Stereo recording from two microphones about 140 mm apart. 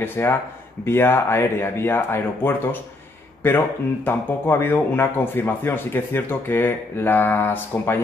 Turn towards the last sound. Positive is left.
turn(degrees=15)  # may be behind; listen again after turning